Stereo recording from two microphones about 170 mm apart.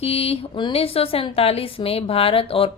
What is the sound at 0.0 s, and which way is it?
Speech, 35° left (ahead or behind).